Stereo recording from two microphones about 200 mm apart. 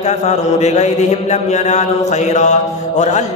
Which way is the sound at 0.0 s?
35° left (ahead or behind).